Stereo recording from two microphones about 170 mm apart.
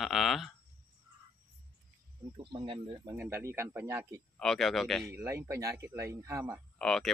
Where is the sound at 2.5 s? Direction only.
30° right (ahead or behind).